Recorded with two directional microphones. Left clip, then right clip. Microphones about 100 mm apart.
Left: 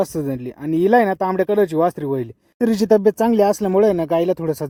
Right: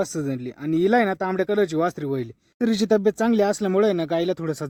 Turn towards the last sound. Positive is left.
turn(degrees=30)  # may be behind; listen again after turning